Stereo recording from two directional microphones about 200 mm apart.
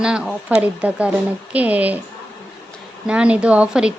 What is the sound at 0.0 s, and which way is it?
A woman's voice, 5° right (ahead or behind).